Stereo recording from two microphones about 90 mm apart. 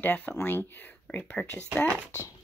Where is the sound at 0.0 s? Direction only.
20° left (ahead or behind).